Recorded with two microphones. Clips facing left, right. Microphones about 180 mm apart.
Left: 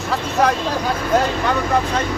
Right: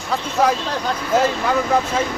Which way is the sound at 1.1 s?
5° right (ahead or behind).